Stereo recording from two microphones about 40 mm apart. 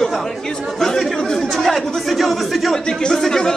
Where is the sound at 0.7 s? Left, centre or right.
Centre.